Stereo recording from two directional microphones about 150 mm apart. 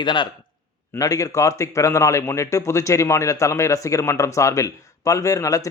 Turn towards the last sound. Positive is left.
turn(degrees=20)  # may be behind; listen again after turning